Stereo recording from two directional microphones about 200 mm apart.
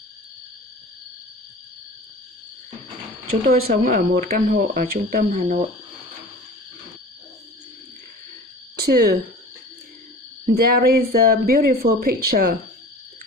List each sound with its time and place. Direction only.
3.6 s speech: 45° right (ahead or behind)
8.7 s a sound: 55° right (ahead or behind)
10.5 s speech: 50° right (ahead or behind)